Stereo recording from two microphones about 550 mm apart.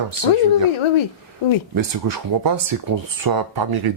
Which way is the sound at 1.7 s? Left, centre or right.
Right.